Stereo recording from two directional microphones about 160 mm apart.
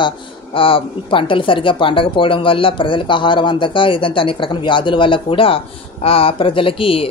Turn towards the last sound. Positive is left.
turn(degrees=35)  # may be behind; listen again after turning